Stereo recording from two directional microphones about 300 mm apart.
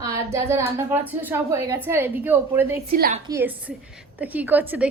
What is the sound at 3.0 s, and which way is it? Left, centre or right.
Speech, right.